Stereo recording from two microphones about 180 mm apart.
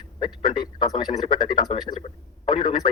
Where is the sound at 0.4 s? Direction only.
25° left (ahead or behind).